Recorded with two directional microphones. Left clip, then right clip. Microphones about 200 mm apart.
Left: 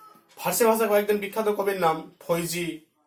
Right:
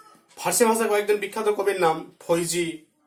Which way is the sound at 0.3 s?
45° right (ahead or behind).